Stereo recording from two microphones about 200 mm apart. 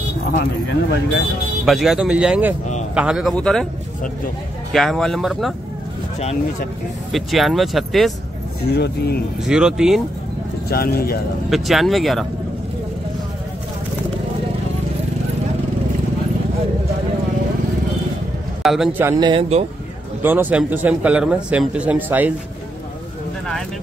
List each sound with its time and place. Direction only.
1.7 s speech: centre (ahead or behind)
4.7 s speech: centre (ahead or behind)
7.1 s speech: centre (ahead or behind)
8.7 s speech: 55° left (ahead or behind)
9.4 s speech: 5° right (ahead or behind)
10.7 s speech: 50° left (ahead or behind)
11.5 s speech: centre (ahead or behind)
18.6 s speech: centre (ahead or behind)
19.1 s speech: 25° right (ahead or behind)
20.2 s speech: 10° right (ahead or behind)